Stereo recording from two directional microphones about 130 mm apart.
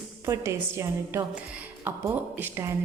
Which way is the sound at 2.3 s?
15° right (ahead or behind).